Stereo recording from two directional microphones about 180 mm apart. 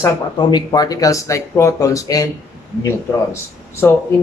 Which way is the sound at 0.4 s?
25° left (ahead or behind).